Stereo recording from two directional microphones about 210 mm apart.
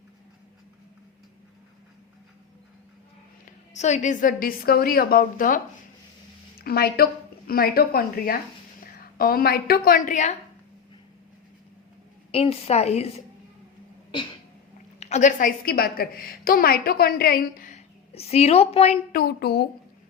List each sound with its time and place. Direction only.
3.8 s a woman's voice: 35° left (ahead or behind)
6.6 s a woman's voice: 45° left (ahead or behind)
12.3 s a woman's voice: 30° left (ahead or behind)
14.9 s a woman's voice: 30° left (ahead or behind)
19.1 s a woman's voice: 50° left (ahead or behind)